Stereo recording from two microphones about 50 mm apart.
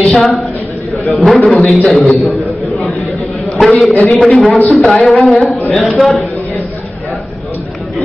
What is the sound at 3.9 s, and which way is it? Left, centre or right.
Speech, left.